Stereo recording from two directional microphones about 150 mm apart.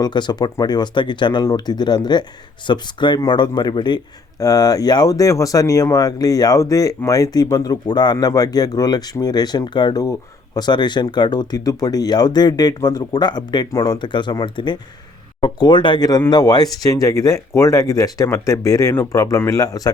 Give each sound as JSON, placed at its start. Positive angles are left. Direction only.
{"t": 0.0, "sound": "speech", "side_deg": 30}